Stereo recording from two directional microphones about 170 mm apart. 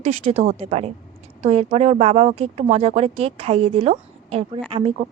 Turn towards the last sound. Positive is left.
turn(degrees=-40)  # may be behind; listen again after turning